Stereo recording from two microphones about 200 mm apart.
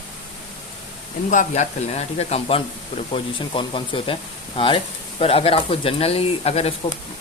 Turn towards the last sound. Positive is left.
turn(degrees=30)  # may be behind; listen again after turning